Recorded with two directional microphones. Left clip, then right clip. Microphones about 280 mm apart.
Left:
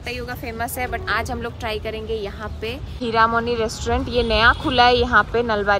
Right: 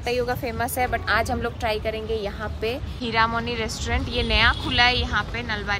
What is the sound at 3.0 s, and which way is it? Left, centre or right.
Speech, centre.